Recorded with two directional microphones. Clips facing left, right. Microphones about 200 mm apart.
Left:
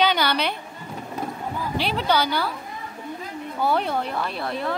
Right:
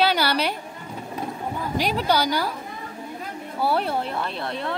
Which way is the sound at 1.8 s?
10° right (ahead or behind).